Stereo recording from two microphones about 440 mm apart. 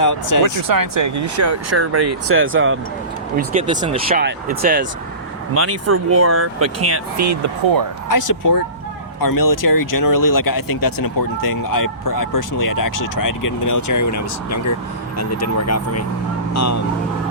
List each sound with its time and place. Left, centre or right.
0.0 s speech: left
0.4 s speech: right
3.3 s speech: centre
5.5 s speech: right
8.1 s speech: left